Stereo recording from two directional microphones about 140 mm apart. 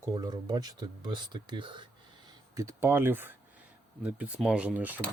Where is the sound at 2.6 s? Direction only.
20° right (ahead or behind).